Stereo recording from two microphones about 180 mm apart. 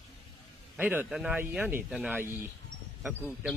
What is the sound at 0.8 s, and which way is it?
Speech, 10° right (ahead or behind).